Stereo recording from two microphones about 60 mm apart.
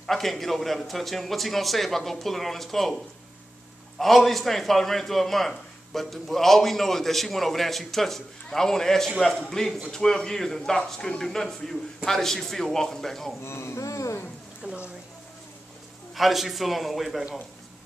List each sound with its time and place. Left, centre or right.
0.0 s a man's voice: centre
4.0 s a man's voice: centre
13.4 s speech: left
13.8 s speech: left
14.6 s speech: centre
16.2 s a man's voice: centre